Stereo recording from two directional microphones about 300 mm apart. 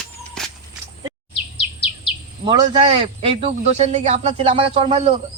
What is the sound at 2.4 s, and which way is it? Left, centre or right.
Speech, centre.